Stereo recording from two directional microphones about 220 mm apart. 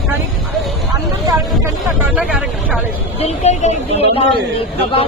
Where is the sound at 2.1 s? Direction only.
5° right (ahead or behind).